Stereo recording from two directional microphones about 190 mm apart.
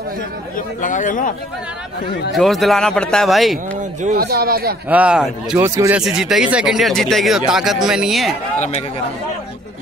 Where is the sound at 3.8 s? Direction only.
40° right (ahead or behind).